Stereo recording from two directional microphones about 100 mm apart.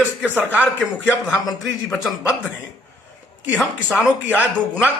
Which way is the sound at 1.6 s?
Centre (ahead or behind).